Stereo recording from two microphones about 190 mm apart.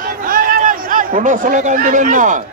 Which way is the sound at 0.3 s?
45° right (ahead or behind).